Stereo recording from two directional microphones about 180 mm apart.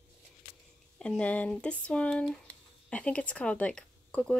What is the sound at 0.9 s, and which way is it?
A child's voice, 5° left (ahead or behind).